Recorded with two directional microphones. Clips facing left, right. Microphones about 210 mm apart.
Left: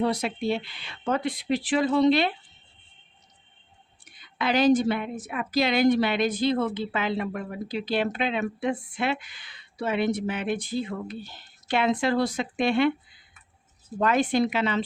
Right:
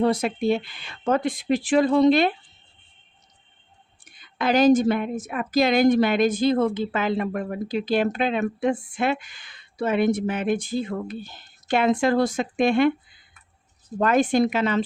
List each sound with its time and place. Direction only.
0.0 s a woman's voice: 50° right (ahead or behind)
4.4 s a woman's voice: 45° right (ahead or behind)
14.0 s a woman's voice: 45° right (ahead or behind)